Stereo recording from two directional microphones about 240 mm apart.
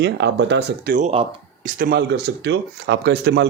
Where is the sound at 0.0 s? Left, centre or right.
Right.